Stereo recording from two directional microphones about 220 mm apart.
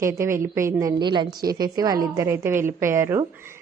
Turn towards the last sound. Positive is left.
turn(degrees=-10)  # may be behind; listen again after turning